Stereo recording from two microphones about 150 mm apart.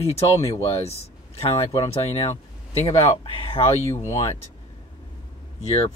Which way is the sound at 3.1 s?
40° left (ahead or behind).